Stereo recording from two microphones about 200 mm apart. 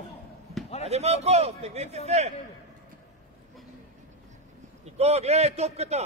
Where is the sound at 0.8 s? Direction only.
30° right (ahead or behind).